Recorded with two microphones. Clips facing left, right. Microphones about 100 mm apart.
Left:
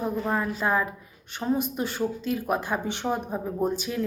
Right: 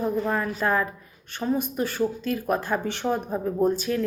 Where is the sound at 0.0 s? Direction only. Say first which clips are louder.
Right 2 dB; 15° left (ahead or behind).